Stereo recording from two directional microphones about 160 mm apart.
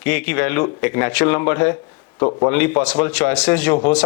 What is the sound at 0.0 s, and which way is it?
Speech, 10° left (ahead or behind).